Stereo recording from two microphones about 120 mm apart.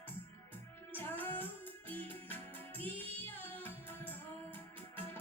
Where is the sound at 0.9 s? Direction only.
15° left (ahead or behind).